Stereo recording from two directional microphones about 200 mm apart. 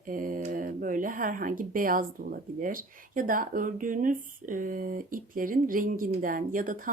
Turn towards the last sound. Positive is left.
turn(degrees=-40)  # may be behind; listen again after turning